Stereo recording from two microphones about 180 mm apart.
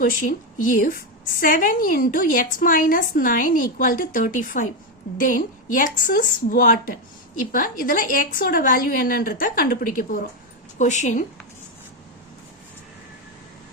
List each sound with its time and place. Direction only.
0.0 s a woman's voice: 50° left (ahead or behind)